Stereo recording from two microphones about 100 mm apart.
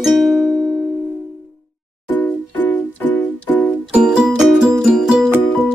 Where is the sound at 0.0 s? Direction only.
Centre (ahead or behind).